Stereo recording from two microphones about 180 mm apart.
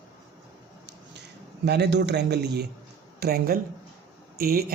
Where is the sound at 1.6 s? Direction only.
65° right (ahead or behind).